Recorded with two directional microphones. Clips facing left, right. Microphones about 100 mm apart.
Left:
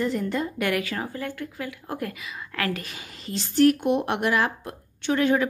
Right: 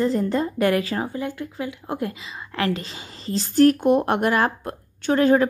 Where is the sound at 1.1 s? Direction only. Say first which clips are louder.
Right 4 dB; 20° right (ahead or behind).